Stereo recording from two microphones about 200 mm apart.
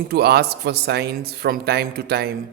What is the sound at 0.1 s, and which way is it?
Speech, 55° right (ahead or behind).